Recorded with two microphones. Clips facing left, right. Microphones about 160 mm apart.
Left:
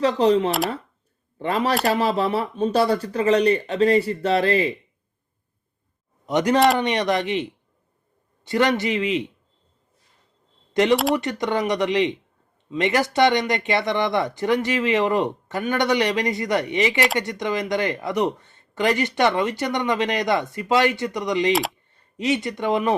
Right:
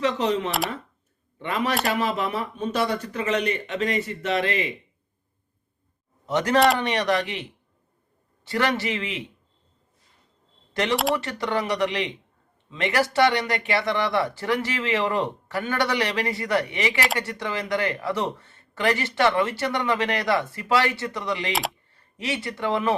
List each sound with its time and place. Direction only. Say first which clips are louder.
0.0 s speech: left 6 dB; 35° left (ahead or behind)
6.2 s speech: left 2 dB; 20° left (ahead or behind)
11.1 s speech: left 3 dB; 20° left (ahead or behind)
21.5 s speech: left 6 dB; centre (ahead or behind)
21.9 s speech: left 11 dB; 20° left (ahead or behind)